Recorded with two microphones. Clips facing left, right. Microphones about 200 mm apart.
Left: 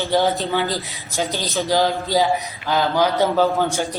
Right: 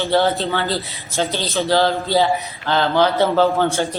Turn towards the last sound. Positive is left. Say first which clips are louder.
# right 2 dB
turn(degrees=15)  # may be behind; listen again after turning